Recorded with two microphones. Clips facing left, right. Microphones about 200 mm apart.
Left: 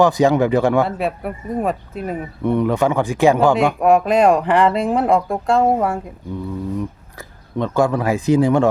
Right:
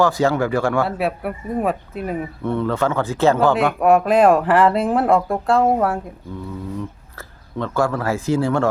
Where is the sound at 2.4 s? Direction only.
15° left (ahead or behind).